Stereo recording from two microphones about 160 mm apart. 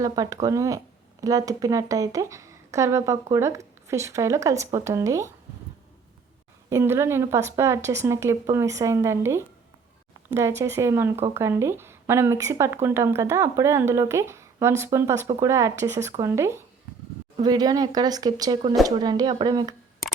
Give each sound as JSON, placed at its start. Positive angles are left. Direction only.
{"t": 0.0, "sound": "speech", "side_deg": -20}
{"t": 6.7, "sound": "speech", "side_deg": -15}